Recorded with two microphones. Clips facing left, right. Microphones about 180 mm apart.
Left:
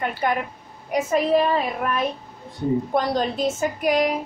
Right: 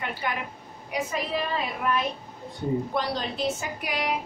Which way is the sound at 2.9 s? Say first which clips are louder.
Left 6 dB; 45° left (ahead or behind).